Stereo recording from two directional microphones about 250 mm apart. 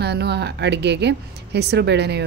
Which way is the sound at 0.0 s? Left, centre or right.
Right.